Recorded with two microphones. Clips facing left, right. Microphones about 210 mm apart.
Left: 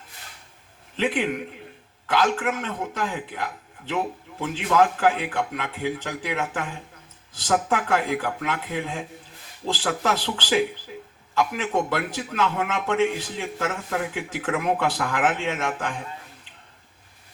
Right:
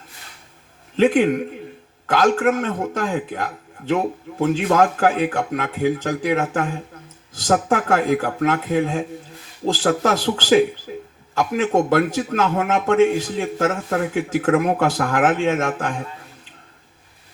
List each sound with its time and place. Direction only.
0.9 s a man's voice: 45° right (ahead or behind)